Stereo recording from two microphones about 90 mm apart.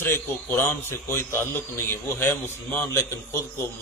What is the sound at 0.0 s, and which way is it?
A man's voice, 25° left (ahead or behind).